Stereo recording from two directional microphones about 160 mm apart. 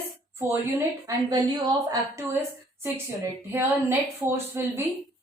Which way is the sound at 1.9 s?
20° right (ahead or behind).